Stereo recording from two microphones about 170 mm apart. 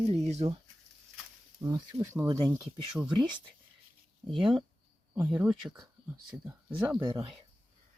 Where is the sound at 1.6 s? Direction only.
25° right (ahead or behind).